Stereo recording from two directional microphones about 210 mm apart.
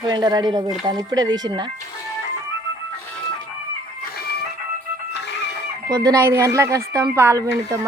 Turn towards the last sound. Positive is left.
turn(degrees=-10)  # may be behind; listen again after turning